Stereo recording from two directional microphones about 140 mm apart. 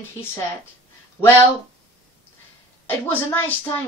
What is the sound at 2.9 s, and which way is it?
Speech, 15° left (ahead or behind).